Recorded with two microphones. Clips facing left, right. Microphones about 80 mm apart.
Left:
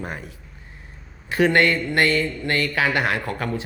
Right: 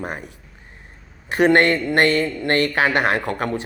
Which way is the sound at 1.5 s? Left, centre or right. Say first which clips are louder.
Right 3 dB; right.